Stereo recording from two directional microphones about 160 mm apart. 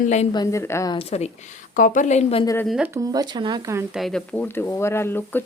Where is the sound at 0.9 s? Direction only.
40° left (ahead or behind).